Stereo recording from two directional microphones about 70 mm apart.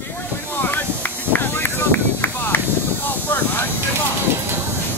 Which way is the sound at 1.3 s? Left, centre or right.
Left.